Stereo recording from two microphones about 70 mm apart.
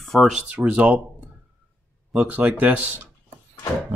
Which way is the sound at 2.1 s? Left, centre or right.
Right.